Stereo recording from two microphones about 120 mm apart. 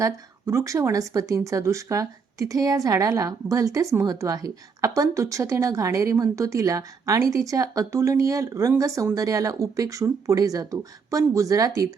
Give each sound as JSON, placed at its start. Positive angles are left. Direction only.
{"t": 0.0, "sound": "speech", "side_deg": -25}